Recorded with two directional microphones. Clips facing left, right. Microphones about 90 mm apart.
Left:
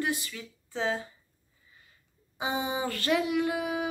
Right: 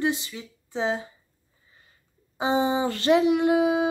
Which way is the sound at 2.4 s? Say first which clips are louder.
Right 8 dB; 30° right (ahead or behind).